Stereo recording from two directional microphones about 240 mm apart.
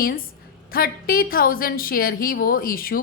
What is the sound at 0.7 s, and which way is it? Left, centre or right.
A woman's voice, left.